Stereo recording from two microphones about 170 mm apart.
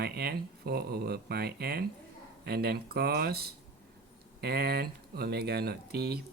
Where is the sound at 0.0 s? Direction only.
70° right (ahead or behind).